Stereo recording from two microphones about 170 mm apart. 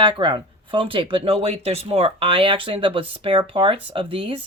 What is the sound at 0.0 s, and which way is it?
Speech, 30° right (ahead or behind).